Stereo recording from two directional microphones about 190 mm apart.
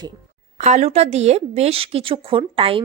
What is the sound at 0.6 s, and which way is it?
A woman's voice, 35° right (ahead or behind).